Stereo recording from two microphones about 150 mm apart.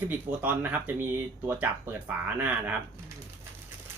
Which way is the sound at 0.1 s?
10° right (ahead or behind).